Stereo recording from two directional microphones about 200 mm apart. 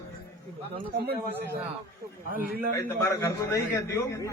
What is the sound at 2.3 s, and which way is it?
Speech, 45° right (ahead or behind).